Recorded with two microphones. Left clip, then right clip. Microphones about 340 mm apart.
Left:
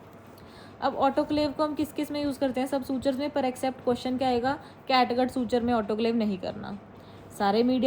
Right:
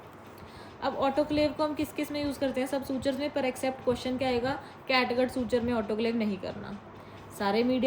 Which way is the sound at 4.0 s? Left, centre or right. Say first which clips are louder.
Left 3 dB; centre.